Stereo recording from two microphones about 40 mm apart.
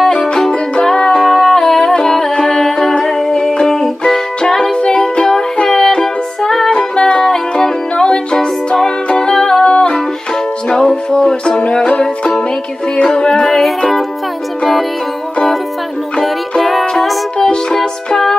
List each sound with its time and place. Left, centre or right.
0.3 s music: left
17.4 s music: centre